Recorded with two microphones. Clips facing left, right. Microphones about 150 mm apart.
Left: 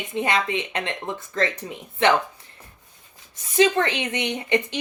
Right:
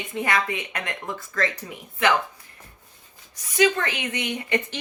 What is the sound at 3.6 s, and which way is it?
Speech, 25° left (ahead or behind).